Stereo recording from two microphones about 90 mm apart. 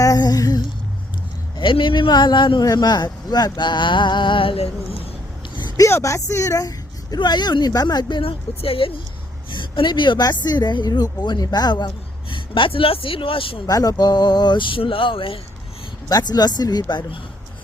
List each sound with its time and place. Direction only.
0.0 s a sound: 45° left (ahead or behind)
1.5 s a man's voice: 65° left (ahead or behind); by 4.9 s 85° left
5.5 s a sound: 55° left (ahead or behind)
5.8 s speech: 35° left (ahead or behind)
8.2 s speech: 90° left
9.5 s speech: 65° left (ahead or behind)
12.3 s speech: 70° left (ahead or behind); by 13.6 s 90° left
13.7 s a man's voice: 45° left (ahead or behind); by 15.4 s 85° left
16.0 s speech: 45° left (ahead or behind)